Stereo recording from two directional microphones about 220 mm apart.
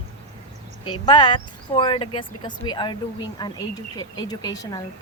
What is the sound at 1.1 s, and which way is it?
A woman's voice, 20° left (ahead or behind).